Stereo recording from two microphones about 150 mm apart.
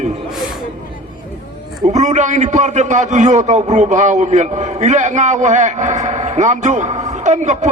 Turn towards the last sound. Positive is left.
turn(degrees=-50)  # may be behind; listen again after turning